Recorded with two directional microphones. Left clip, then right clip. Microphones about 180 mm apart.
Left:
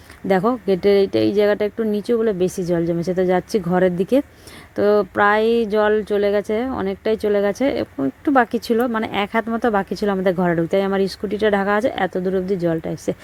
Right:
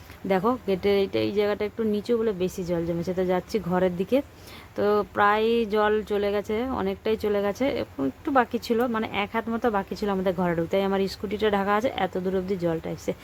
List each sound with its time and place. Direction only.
0.3 s speech: 30° left (ahead or behind)